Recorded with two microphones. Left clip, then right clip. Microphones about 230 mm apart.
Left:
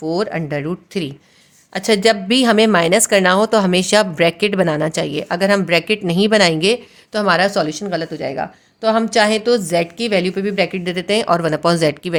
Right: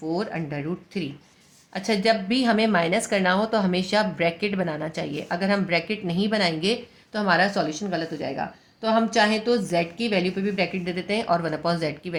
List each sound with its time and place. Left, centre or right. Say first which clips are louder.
0.0 s a woman's voice: left 8 dB; left